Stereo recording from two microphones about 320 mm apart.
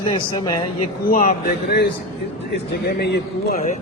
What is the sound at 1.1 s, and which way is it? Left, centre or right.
Speech, left.